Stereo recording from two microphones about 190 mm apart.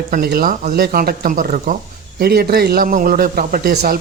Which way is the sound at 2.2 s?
55° right (ahead or behind).